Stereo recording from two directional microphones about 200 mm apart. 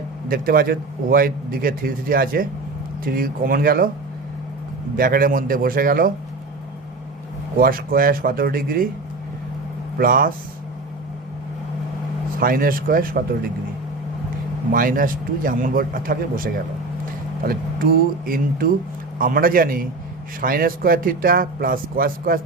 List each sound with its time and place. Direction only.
0.3 s a man's voice: 45° right (ahead or behind)
4.9 s a man's voice: 45° right (ahead or behind)
7.5 s a man's voice: 45° right (ahead or behind)
10.0 s a man's voice: 45° right (ahead or behind)
12.4 s a man's voice: 45° right (ahead or behind)
14.7 s a man's voice: 45° right (ahead or behind)